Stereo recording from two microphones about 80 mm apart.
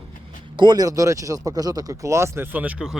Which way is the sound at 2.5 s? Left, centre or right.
Centre.